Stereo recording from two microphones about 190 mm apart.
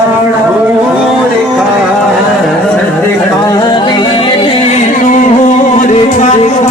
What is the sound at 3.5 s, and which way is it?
Music, 25° left (ahead or behind).